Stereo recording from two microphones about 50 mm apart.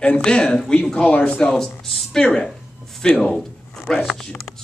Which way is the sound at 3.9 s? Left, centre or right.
Centre.